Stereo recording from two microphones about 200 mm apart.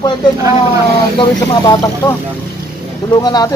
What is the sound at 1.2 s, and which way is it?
Speech, 20° left (ahead or behind).